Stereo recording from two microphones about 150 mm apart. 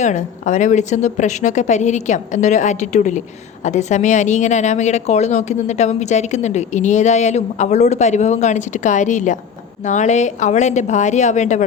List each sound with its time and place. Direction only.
0.0 s a woman's voice: 55° left (ahead or behind)